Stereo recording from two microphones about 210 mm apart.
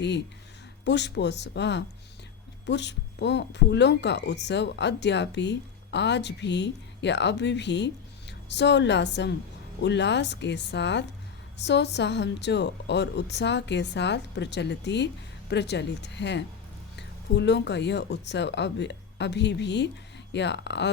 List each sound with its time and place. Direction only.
0.9 s speech: 55° left (ahead or behind)